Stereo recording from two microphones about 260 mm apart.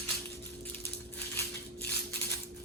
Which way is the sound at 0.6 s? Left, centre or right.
Centre.